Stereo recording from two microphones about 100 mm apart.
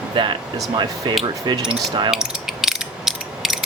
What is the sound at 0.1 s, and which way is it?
Speech, 55° right (ahead or behind).